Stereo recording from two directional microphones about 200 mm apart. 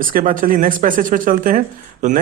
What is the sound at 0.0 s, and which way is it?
Speech, 45° right (ahead or behind).